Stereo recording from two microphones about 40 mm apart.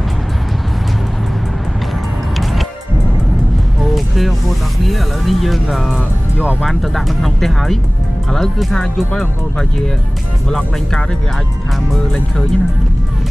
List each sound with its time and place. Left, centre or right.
4.8 s speech: centre